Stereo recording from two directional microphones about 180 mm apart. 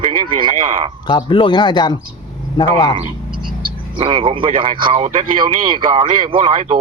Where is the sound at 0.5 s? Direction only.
45° right (ahead or behind).